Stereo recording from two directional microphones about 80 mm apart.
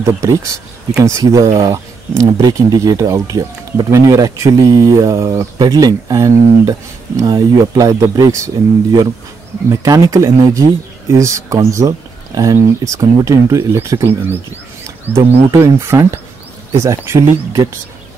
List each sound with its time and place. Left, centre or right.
0.0 s speech: right
5.6 s speech: right
9.7 s speech: right